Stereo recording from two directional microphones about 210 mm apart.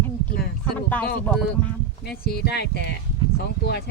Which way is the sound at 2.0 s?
45° left (ahead or behind).